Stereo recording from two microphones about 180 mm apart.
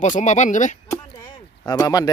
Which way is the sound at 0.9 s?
20° left (ahead or behind).